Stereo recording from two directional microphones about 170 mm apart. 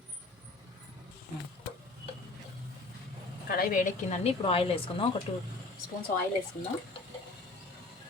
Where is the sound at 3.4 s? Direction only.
55° left (ahead or behind).